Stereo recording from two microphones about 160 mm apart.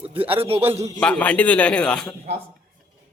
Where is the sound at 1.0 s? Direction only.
10° left (ahead or behind).